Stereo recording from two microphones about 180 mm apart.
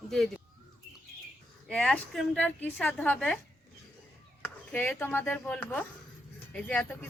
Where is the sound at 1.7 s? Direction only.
5° left (ahead or behind).